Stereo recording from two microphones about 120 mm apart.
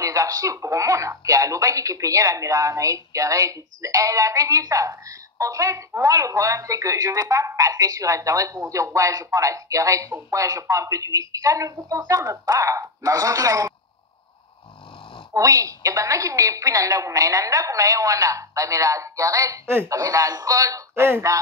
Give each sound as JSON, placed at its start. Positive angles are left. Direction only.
{"t": 0.0, "sound": "speech", "side_deg": -30}
{"t": 15.3, "sound": "speech", "side_deg": -30}